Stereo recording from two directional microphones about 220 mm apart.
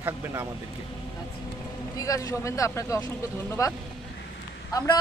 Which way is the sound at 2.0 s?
15° left (ahead or behind).